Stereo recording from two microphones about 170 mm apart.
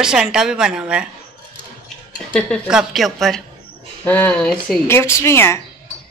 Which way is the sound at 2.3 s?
Centre (ahead or behind).